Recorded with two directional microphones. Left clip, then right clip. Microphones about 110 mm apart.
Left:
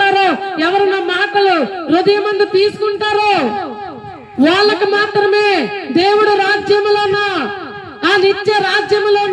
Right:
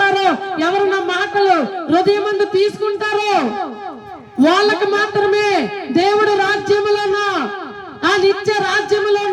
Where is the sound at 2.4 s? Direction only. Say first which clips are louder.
Left 3 dB; 20° left (ahead or behind).